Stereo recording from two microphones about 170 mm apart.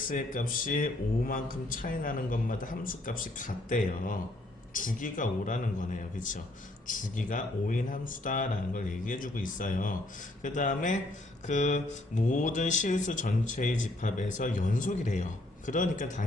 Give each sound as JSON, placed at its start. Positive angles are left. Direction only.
{"t": 0.1, "sound": "speech", "side_deg": 55}